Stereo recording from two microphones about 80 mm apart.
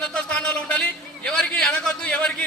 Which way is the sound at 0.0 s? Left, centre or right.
Centre.